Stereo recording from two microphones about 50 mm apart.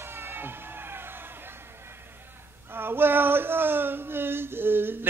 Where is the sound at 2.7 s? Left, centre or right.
Right.